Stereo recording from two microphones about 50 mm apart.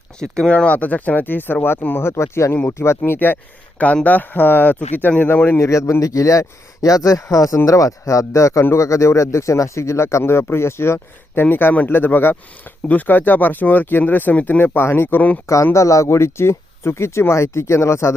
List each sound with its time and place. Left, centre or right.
0.2 s speech: centre
0.5 s speech: left
2.0 s speech: left
3.1 s speech: left
5.5 s speech: left
11.4 s speech: left
14.6 s speech: left
15.7 s speech: left